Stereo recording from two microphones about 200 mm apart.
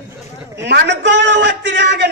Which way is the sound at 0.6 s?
60° right (ahead or behind).